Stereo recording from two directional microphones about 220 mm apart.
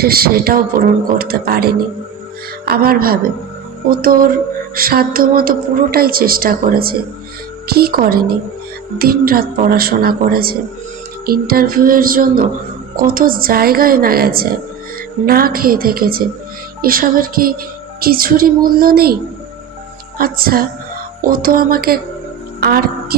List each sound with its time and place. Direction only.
0.0 s a woman's voice: 45° right (ahead or behind)